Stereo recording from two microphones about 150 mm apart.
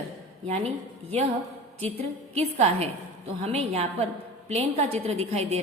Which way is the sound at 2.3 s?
45° right (ahead or behind).